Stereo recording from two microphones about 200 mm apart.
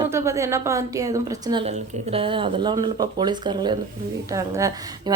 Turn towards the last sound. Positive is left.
turn(degrees=-15)  # may be behind; listen again after turning